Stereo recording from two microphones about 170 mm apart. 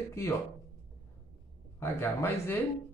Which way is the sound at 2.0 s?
15° left (ahead or behind).